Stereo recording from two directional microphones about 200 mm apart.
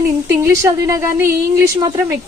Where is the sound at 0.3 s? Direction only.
15° right (ahead or behind).